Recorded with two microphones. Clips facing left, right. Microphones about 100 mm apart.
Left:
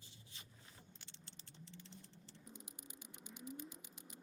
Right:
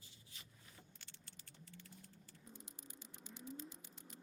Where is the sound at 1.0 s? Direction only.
25° left (ahead or behind).